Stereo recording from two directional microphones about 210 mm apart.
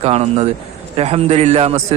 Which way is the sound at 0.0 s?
30° right (ahead or behind).